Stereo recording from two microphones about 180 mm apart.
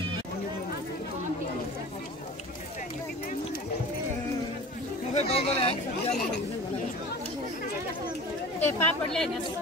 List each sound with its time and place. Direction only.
5.1 s chatter: 35° left (ahead or behind)
8.5 s speech: 10° left (ahead or behind)